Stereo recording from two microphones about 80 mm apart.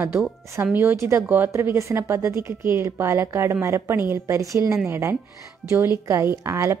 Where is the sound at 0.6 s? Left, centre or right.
Right.